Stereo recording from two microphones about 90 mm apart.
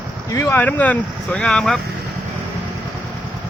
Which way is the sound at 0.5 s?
20° left (ahead or behind).